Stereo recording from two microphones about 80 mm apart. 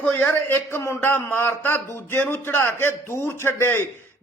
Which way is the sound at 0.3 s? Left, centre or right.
Left.